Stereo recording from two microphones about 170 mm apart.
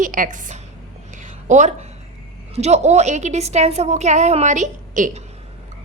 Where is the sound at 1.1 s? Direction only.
45° right (ahead or behind).